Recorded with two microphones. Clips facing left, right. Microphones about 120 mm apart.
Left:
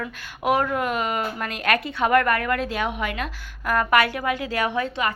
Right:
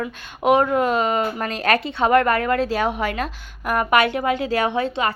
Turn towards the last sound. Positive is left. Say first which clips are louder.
# right 3 dB
turn(degrees=-25)  # may be behind; listen again after turning